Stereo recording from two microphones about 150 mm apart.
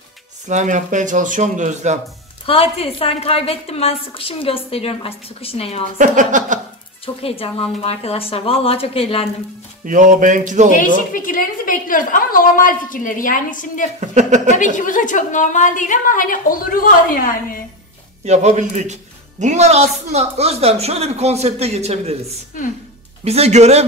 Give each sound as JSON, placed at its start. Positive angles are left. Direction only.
{"t": 0.5, "sound": "speech", "side_deg": -55}
{"t": 2.4, "sound": "a woman's voice", "side_deg": 40}
{"t": 5.9, "sound": "speech", "side_deg": -60}
{"t": 7.2, "sound": "a woman's voice", "side_deg": 40}
{"t": 9.8, "sound": "speech", "side_deg": -60}
{"t": 11.1, "sound": "a woman's voice", "side_deg": 65}
{"t": 13.9, "sound": "speech", "side_deg": -50}
{"t": 14.5, "sound": "a woman's voice", "side_deg": 55}
{"t": 18.2, "sound": "speech", "side_deg": -50}